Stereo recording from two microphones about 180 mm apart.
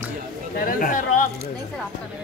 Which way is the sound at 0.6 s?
50° left (ahead or behind).